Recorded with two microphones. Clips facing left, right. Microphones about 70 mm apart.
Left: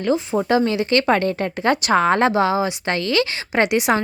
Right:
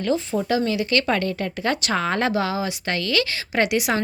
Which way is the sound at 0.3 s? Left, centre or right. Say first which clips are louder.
Left 4 dB; left.